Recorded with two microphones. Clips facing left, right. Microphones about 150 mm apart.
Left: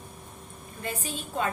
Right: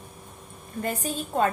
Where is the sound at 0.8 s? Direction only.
45° right (ahead or behind).